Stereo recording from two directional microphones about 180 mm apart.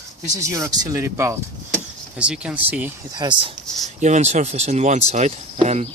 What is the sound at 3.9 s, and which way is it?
Speech, 40° right (ahead or behind).